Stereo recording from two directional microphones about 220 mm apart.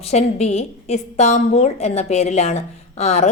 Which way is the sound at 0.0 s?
30° left (ahead or behind).